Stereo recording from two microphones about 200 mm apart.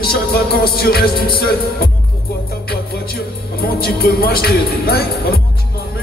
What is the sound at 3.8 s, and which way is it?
Speech, 50° left (ahead or behind).